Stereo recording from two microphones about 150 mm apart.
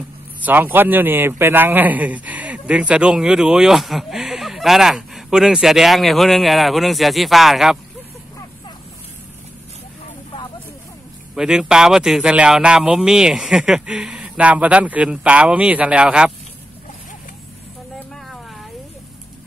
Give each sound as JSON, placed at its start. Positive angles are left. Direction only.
{"t": 0.4, "sound": "a man's voice", "side_deg": -10}
{"t": 11.3, "sound": "a man's voice", "side_deg": -5}
{"t": 17.9, "sound": "vehicle", "side_deg": 0}